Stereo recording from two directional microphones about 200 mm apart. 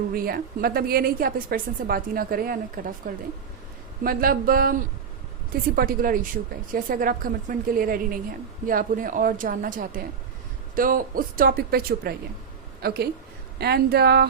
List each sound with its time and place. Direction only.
0.1 s a woman's voice: 45° right (ahead or behind)
4.0 s a woman's voice: 45° right (ahead or behind)